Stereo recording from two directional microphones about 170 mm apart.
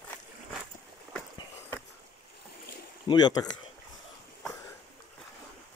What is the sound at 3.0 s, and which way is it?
Speech, 25° left (ahead or behind).